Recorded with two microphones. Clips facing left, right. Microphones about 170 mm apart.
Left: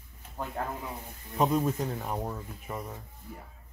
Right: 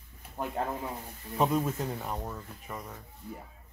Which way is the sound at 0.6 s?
25° right (ahead or behind).